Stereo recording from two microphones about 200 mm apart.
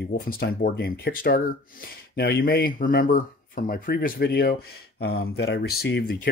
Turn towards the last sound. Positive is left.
turn(degrees=45)  # may be behind; listen again after turning